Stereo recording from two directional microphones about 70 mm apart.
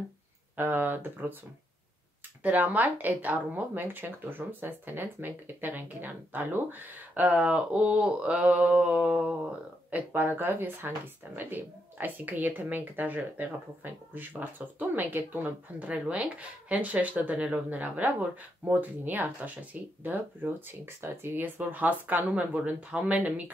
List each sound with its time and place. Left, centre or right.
0.6 s a woman's voice: right
2.4 s a woman's voice: right